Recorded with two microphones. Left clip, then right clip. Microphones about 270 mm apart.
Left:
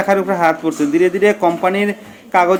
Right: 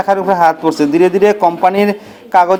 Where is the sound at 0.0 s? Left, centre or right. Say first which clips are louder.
Right 3 dB; centre.